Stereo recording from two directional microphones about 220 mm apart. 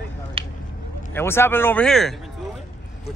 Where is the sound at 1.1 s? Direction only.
10° left (ahead or behind).